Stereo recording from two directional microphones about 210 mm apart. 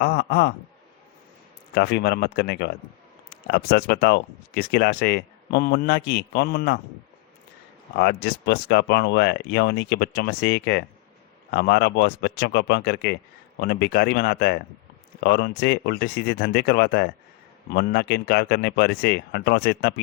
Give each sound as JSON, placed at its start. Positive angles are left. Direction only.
{"t": 0.0, "sound": "speech", "side_deg": 50}
{"t": 1.7, "sound": "speech", "side_deg": 50}
{"t": 7.9, "sound": "speech", "side_deg": 50}